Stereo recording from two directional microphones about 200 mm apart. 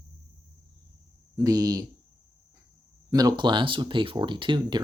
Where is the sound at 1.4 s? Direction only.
15° right (ahead or behind).